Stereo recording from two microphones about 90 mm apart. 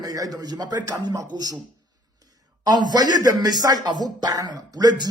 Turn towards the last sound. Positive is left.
turn(degrees=-45)  # may be behind; listen again after turning